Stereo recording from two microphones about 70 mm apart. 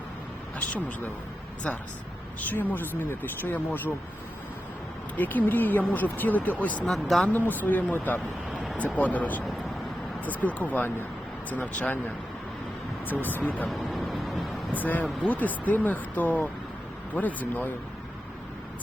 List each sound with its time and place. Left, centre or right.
2.4 s speech: left
5.1 s speech: left
6.8 s a man's voice: centre
7.3 s speech: left
13.9 s vehicle: centre
14.7 s speech: left